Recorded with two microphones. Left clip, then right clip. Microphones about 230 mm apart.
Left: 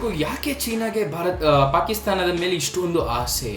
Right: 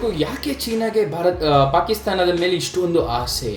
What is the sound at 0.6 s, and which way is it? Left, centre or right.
Speech, centre.